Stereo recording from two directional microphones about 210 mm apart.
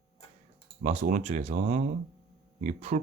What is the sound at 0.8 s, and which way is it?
Speech, 35° right (ahead or behind).